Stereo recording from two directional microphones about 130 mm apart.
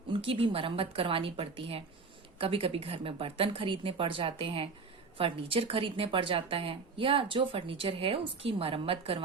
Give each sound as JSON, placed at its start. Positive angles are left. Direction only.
{"t": 0.1, "sound": "speech", "side_deg": -45}